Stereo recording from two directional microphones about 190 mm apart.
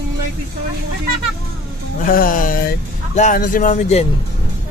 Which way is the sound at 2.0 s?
45° left (ahead or behind).